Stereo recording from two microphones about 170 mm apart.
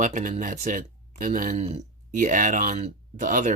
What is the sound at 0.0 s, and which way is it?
Speech, 50° right (ahead or behind).